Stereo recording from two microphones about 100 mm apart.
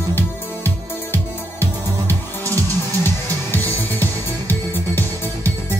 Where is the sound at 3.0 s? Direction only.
20° left (ahead or behind).